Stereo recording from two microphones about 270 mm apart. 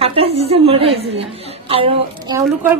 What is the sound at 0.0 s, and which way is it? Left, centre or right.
A woman's voice, right.